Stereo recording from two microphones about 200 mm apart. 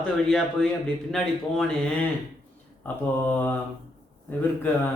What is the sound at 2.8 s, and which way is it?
A man's voice, 10° left (ahead or behind).